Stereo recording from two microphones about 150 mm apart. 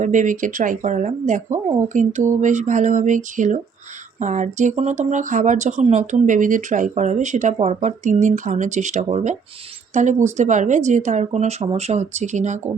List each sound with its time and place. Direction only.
0.0 s speech: 60° right (ahead or behind)